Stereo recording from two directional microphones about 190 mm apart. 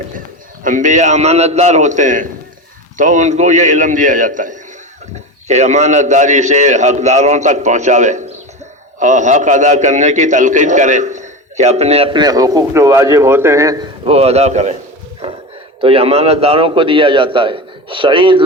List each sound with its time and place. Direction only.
0.6 s a man's voice: 40° right (ahead or behind); by 13.8 s 15° right (ahead or behind)
14.0 s a man's voice: 30° right (ahead or behind)
15.8 s a man's voice: 30° right (ahead or behind)